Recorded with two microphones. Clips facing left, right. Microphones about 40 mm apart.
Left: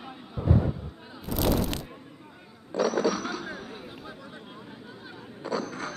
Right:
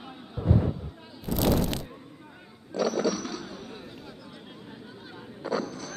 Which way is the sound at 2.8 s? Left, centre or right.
Centre.